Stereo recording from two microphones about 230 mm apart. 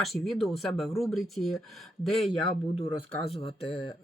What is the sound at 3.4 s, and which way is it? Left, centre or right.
Speech, left.